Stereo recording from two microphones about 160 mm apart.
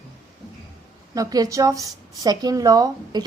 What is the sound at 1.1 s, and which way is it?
A woman's voice, 20° right (ahead or behind).